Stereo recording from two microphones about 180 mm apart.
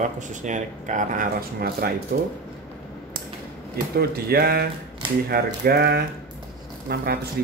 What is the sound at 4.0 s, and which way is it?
Speech, 60° right (ahead or behind).